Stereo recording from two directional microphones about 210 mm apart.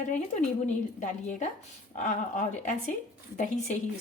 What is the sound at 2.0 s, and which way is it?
Speech, 35° left (ahead or behind).